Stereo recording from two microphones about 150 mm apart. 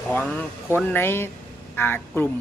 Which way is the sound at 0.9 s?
15° left (ahead or behind).